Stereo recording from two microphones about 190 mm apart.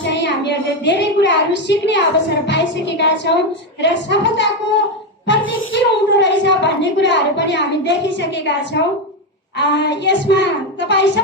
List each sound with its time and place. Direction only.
0.0 s a woman's voice: 65° left (ahead or behind)
5.7 s a woman's voice: 65° left (ahead or behind)